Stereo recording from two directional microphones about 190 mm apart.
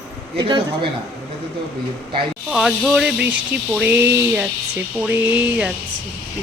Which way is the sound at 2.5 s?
Centre (ahead or behind).